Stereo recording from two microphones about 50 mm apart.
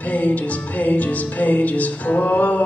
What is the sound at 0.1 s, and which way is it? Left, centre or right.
Music, left.